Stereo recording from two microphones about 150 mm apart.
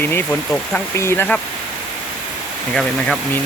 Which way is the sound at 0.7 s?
15° left (ahead or behind).